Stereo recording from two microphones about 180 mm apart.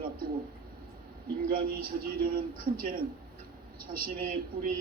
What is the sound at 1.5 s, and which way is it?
A man's voice, 55° right (ahead or behind).